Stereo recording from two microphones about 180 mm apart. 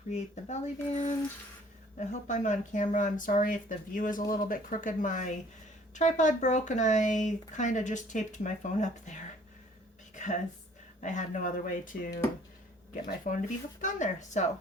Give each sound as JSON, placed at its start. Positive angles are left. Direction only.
{"t": 0.1, "sound": "speech", "side_deg": 40}
{"t": 11.0, "sound": "speech", "side_deg": 45}